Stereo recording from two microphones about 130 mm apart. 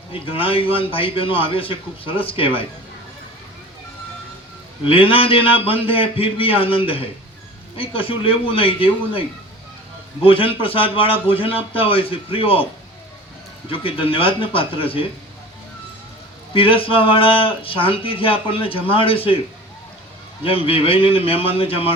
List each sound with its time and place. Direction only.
0.1 s speech: 45° left (ahead or behind)
4.9 s speech: 45° left (ahead or behind)
10.2 s speech: 45° left (ahead or behind)
13.7 s speech: 45° left (ahead or behind)
16.6 s speech: 45° left (ahead or behind)
20.4 s speech: 45° left (ahead or behind)